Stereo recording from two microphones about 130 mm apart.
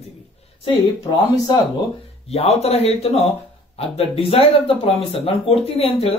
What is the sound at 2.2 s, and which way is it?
Speech, 50° left (ahead or behind).